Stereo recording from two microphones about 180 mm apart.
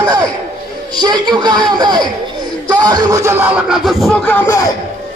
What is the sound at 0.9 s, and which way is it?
A man's voice, 25° right (ahead or behind).